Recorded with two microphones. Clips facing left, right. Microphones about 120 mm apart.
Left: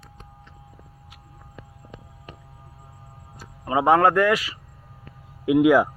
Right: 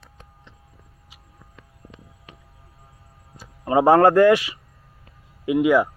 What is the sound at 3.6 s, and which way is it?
Speech, 35° right (ahead or behind).